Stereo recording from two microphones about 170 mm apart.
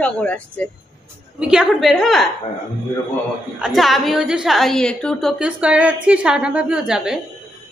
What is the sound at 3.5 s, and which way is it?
A woman's voice, centre (ahead or behind).